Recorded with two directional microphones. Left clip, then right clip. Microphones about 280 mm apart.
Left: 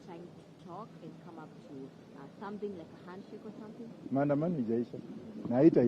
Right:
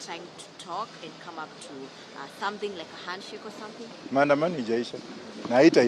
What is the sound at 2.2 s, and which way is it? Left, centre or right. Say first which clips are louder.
Speech: right 13 dB; centre.